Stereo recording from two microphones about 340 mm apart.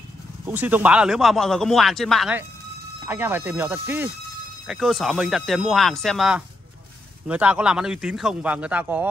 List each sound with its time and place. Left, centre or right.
0.5 s speech: centre